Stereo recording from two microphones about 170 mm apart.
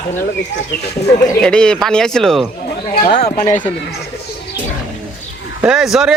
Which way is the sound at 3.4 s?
45° left (ahead or behind).